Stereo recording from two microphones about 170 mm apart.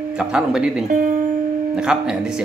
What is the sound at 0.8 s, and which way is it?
Speech, 50° right (ahead or behind).